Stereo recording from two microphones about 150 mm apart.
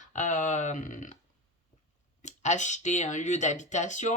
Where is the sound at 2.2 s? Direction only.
50° left (ahead or behind).